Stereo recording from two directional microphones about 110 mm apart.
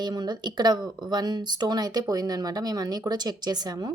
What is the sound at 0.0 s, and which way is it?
Speech, 40° right (ahead or behind).